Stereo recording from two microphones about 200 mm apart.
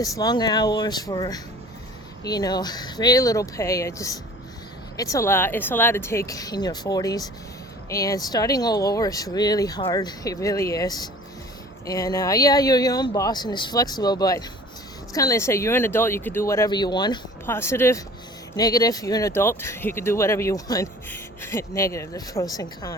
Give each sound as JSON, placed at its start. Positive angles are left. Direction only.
{"t": 0.2, "sound": "speech", "side_deg": 20}